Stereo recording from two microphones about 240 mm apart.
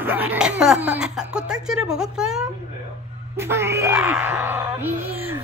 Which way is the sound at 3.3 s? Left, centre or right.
Centre.